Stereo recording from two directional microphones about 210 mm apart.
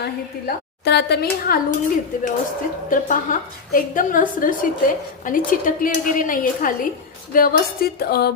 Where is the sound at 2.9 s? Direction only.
40° left (ahead or behind).